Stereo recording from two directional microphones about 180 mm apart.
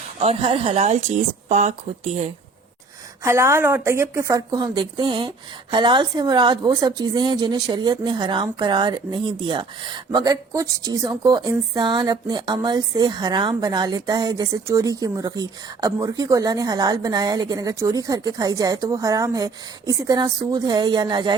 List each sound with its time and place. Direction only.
0.2 s speech: 35° right (ahead or behind)
3.2 s a woman's voice: 15° right (ahead or behind)